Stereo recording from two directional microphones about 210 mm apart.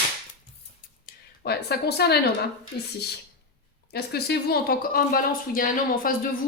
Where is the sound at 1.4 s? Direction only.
50° left (ahead or behind).